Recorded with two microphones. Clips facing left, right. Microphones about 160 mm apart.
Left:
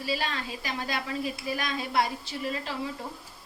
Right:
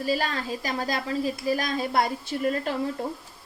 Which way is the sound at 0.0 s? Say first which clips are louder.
Right 5 dB; 45° right (ahead or behind).